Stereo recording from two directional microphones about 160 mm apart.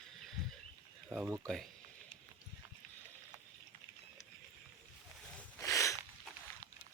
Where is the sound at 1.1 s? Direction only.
15° right (ahead or behind).